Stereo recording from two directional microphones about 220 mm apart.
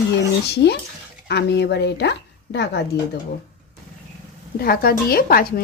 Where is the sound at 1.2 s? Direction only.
50° left (ahead or behind).